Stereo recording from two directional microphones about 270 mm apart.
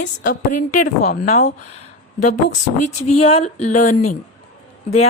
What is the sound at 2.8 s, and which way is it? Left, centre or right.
Speech, left.